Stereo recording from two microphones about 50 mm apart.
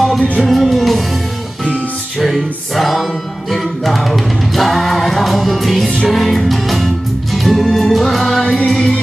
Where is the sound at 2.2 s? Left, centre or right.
Centre.